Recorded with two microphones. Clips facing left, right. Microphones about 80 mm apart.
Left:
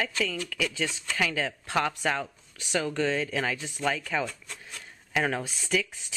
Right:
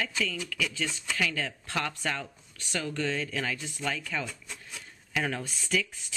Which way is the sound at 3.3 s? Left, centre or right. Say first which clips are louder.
Left 3 dB; left.